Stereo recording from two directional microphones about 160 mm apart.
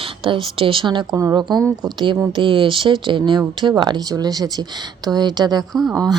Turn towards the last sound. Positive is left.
turn(degrees=0)  # may be behind; listen again after turning